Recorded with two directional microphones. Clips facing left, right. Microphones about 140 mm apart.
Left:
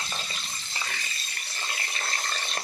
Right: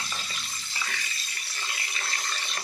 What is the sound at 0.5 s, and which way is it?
Water, 45° left (ahead or behind).